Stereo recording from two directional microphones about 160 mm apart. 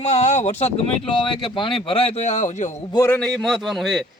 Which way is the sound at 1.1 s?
30° left (ahead or behind).